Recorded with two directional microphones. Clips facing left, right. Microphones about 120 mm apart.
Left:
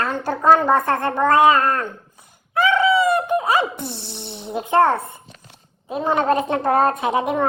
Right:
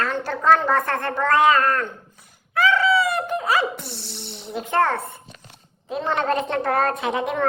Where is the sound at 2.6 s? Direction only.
20° left (ahead or behind).